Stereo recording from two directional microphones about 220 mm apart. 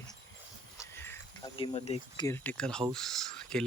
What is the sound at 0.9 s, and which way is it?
Cricket, 10° left (ahead or behind).